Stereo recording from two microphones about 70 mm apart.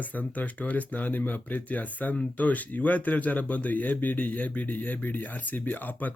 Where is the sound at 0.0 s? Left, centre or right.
Left.